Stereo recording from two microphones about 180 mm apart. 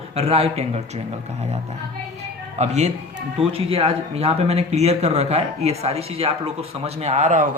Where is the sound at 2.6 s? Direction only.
35° right (ahead or behind).